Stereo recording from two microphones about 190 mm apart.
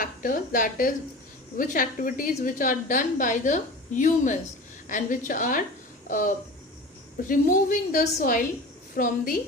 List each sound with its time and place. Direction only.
0.0 s a woman's voice: 45° left (ahead or behind)